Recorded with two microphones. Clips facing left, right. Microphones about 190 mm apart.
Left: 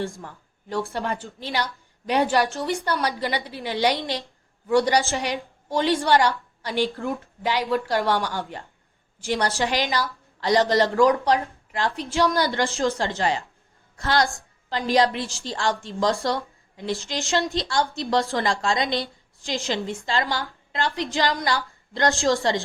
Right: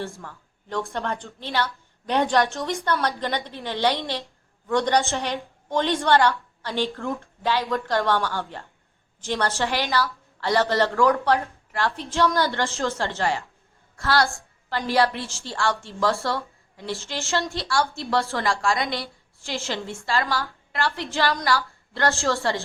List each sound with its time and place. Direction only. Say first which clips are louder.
0.0 s a woman's voice: left 3 dB; 15° left (ahead or behind)